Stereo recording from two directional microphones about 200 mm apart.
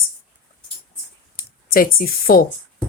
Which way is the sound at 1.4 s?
45° left (ahead or behind).